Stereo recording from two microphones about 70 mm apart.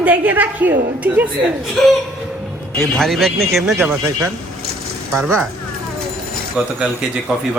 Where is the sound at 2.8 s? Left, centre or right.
Centre.